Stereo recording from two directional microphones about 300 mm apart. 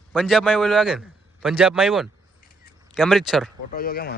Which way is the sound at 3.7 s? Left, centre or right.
Left.